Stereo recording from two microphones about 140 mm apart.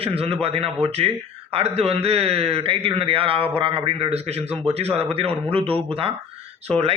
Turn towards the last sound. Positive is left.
turn(degrees=-45)  # may be behind; listen again after turning